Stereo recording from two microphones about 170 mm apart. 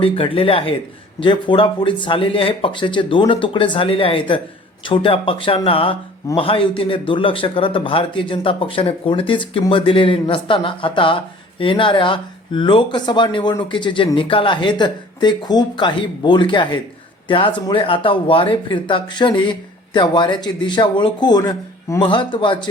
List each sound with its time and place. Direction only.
0.0 s speech: 30° left (ahead or behind)